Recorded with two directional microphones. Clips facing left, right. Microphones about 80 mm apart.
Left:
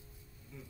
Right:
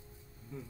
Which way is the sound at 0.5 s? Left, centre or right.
Right.